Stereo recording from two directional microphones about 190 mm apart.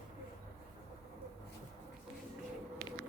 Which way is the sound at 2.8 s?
5° left (ahead or behind).